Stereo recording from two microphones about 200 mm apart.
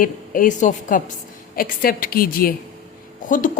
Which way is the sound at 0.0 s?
40° left (ahead or behind).